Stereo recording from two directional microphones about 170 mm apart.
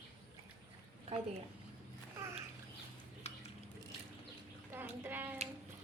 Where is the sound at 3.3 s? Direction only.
40° left (ahead or behind).